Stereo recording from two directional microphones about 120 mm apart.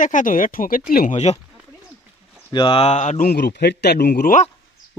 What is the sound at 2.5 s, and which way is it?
Speech, 45° left (ahead or behind).